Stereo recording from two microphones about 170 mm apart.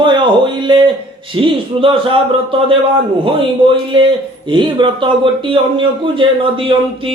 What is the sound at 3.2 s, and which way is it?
A man's voice, 30° right (ahead or behind).